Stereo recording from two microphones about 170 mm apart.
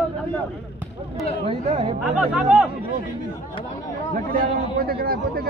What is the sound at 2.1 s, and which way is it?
Speech, 5° right (ahead or behind).